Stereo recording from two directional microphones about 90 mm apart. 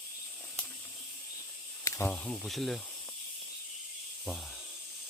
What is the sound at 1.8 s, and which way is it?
Snake, 35° left (ahead or behind).